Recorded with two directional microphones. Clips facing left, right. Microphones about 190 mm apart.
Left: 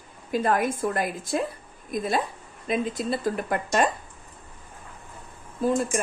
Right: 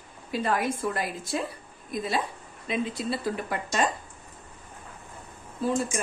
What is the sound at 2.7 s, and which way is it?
Speech, 45° left (ahead or behind).